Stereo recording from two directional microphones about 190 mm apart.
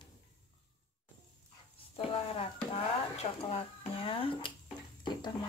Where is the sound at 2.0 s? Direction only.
30° left (ahead or behind).